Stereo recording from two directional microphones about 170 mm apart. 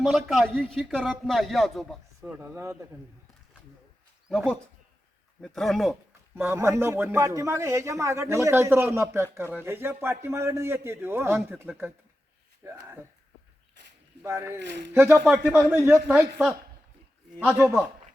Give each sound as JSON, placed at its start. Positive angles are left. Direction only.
{"t": 0.0, "sound": "a man's voice", "side_deg": 0}
{"t": 4.3, "sound": "a man's voice", "side_deg": 0}
{"t": 6.3, "sound": "speech", "side_deg": -15}
{"t": 14.3, "sound": "speech", "side_deg": -15}
{"t": 15.1, "sound": "a man's voice", "side_deg": 0}
{"t": 15.7, "sound": "speech", "side_deg": -15}
{"t": 17.4, "sound": "speech", "side_deg": -15}